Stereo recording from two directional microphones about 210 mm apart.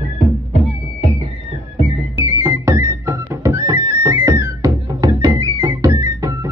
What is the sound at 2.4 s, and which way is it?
Music, 10° right (ahead or behind).